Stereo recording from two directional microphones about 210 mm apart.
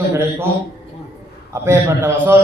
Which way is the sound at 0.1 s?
10° right (ahead or behind).